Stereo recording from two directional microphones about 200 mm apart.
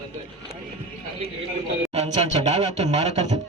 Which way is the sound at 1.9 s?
35° right (ahead or behind).